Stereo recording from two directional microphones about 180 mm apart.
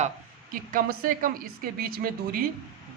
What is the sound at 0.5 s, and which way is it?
A man's voice, 50° right (ahead or behind).